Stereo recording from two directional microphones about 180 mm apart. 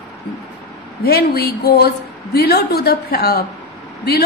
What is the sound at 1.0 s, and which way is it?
A woman's voice, 60° left (ahead or behind).